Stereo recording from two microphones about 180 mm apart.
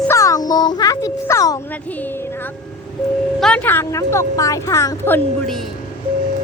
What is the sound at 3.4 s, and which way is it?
A woman's voice, 5° left (ahead or behind).